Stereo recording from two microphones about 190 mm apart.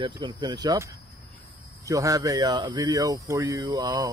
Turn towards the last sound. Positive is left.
turn(degrees=-20)  # may be behind; listen again after turning